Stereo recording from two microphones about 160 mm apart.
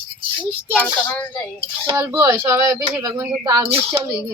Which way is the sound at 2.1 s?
20° right (ahead or behind).